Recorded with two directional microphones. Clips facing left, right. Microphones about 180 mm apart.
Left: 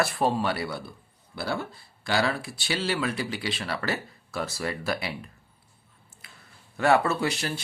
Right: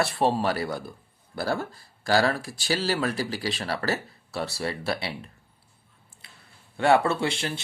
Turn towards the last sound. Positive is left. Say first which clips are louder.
# right 1 dB
turn(degrees=-25)  # may be behind; listen again after turning